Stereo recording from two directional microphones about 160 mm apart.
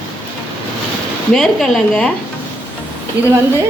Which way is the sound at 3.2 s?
90° right.